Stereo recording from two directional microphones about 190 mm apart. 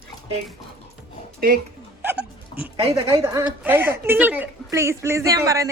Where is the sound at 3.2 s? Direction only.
15° right (ahead or behind).